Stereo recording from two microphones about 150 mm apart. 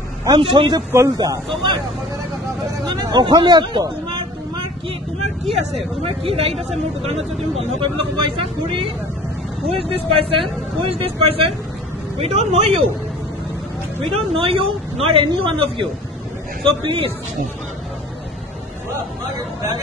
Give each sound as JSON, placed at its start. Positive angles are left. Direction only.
{"t": 0.2, "sound": "speech", "side_deg": -30}
{"t": 3.0, "sound": "speech", "side_deg": -25}
{"t": 6.0, "sound": "speech", "side_deg": -40}
{"t": 14.1, "sound": "speech", "side_deg": -40}